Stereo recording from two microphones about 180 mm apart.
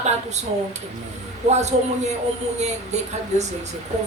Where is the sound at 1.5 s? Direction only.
40° right (ahead or behind).